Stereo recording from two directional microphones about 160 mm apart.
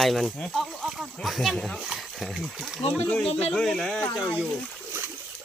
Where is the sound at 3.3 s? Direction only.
40° left (ahead or behind).